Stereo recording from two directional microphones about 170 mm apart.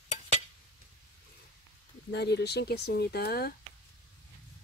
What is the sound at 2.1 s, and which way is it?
Speech, 80° left.